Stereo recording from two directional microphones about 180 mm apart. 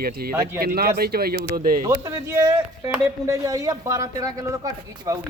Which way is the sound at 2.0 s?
15° right (ahead or behind).